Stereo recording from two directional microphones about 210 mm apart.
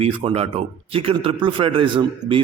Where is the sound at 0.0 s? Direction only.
30° right (ahead or behind).